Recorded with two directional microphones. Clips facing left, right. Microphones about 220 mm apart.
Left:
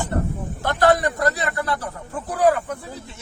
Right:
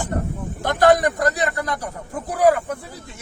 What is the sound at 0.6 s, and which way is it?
Speech, 15° right (ahead or behind).